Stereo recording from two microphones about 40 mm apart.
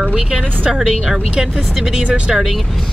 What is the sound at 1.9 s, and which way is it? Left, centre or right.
Speech, right.